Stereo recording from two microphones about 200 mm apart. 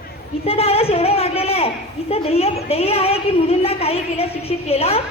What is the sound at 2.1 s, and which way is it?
A woman's voice, 30° left (ahead or behind).